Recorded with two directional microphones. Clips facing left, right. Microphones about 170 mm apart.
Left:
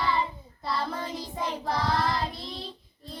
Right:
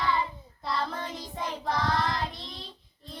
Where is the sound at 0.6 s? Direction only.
5° left (ahead or behind).